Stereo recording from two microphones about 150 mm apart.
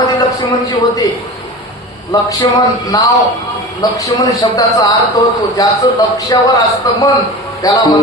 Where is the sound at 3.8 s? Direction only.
25° left (ahead or behind).